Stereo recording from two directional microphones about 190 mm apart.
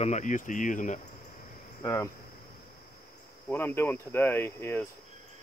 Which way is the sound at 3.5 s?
10° left (ahead or behind).